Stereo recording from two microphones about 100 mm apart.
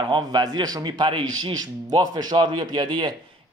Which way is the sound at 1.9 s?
45° right (ahead or behind).